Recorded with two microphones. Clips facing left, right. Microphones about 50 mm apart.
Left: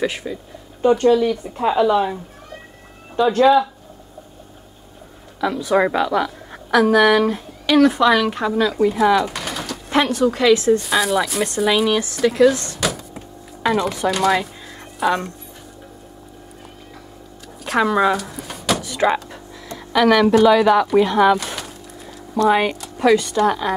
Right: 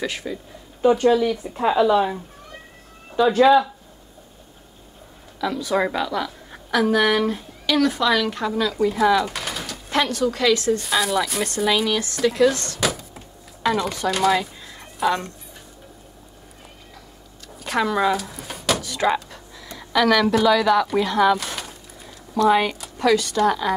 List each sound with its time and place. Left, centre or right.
0.2 s speech: centre
5.4 s a woman's voice: centre
8.9 s a sound: centre
9.8 s a woman's voice: centre
10.8 s speech: centre
17.6 s speech: centre
18.8 s door: centre
19.9 s a woman's voice: centre
21.4 s a sound: centre
22.5 s a woman's voice: centre